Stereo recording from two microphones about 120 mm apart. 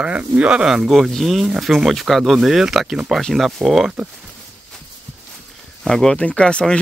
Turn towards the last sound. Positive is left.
turn(degrees=5)  # may be behind; listen again after turning